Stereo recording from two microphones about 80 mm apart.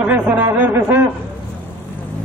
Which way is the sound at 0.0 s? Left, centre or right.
Centre.